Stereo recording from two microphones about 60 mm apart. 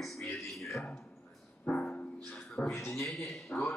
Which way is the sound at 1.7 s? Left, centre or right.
Left.